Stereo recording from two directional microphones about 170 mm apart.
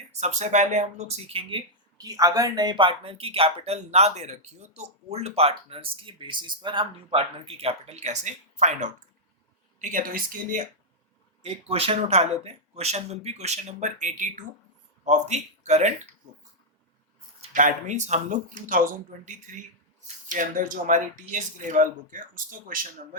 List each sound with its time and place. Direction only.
0.1 s speech: 45° right (ahead or behind)
11.4 s speech: 35° right (ahead or behind)
17.5 s speech: 50° right (ahead or behind)